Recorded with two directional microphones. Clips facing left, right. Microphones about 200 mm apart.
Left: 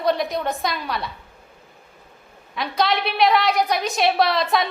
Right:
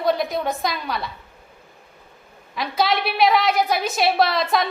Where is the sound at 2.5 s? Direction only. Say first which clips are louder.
Even; centre (ahead or behind).